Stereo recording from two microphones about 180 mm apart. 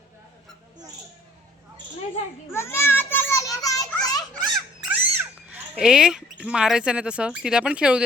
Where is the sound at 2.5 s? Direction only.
15° left (ahead or behind).